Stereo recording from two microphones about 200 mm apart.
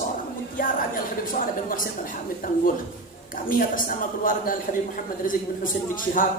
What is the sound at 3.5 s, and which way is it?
A man's voice, 45° left (ahead or behind).